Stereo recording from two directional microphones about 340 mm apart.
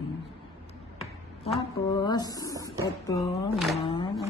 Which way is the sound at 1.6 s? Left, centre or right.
Centre.